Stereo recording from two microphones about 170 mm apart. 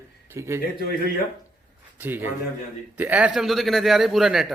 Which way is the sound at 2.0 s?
10° right (ahead or behind).